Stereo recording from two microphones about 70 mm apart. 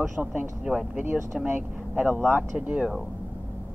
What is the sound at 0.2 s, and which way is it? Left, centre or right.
Speech, right.